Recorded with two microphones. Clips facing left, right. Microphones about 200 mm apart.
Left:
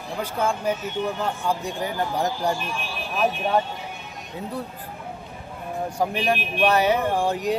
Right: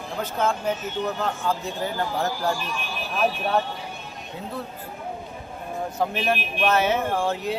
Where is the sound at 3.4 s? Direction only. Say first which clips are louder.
Left 1 dB; 15° left (ahead or behind).